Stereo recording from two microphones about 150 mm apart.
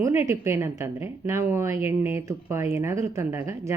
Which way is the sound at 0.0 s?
20° right (ahead or behind).